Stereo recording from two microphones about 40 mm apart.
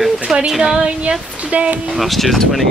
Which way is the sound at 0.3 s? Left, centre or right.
Centre.